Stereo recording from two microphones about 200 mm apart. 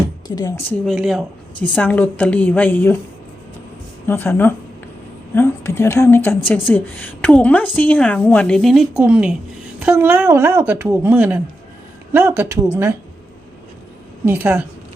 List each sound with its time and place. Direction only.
0.3 s speech: 20° left (ahead or behind)
0.9 s a woman's voice: centre (ahead or behind)
4.0 s a woman's voice: 10° left (ahead or behind); by 12.9 s 10° right (ahead or behind)
14.3 s speech: 10° right (ahead or behind)